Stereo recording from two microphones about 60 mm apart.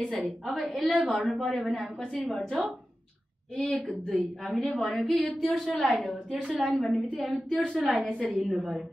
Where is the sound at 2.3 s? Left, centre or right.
Centre.